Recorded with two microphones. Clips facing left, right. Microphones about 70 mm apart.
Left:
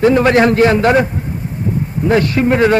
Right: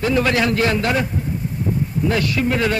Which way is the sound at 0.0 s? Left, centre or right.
Left.